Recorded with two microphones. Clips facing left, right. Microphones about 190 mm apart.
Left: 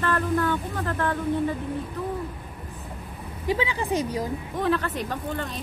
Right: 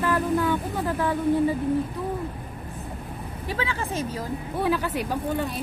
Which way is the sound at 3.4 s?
15° left (ahead or behind).